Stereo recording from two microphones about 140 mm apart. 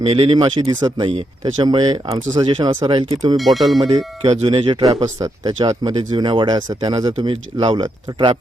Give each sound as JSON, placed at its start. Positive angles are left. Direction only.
{"t": 0.0, "sound": "speech", "side_deg": -45}
{"t": 3.3, "sound": "speech", "side_deg": 0}
{"t": 4.3, "sound": "speech", "side_deg": -40}
{"t": 4.8, "sound": "speech", "side_deg": -25}